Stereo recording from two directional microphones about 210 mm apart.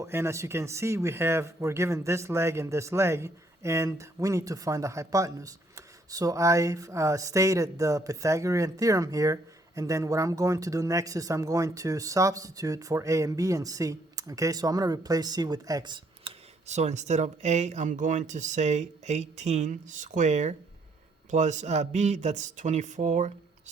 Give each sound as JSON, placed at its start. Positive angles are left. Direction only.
{"t": 0.0, "sound": "speech", "side_deg": -10}
{"t": 16.6, "sound": "speech", "side_deg": -30}